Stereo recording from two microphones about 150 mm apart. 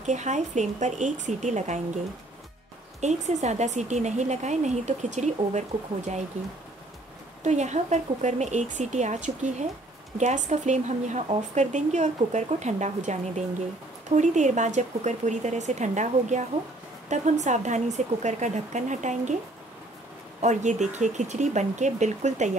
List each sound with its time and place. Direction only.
0.0 s speech: 55° right (ahead or behind)
3.0 s speech: 50° right (ahead or behind)
7.4 s speech: 50° right (ahead or behind)
20.4 s speech: 50° right (ahead or behind)